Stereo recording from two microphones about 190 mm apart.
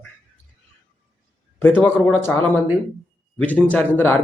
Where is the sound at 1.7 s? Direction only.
5° right (ahead or behind).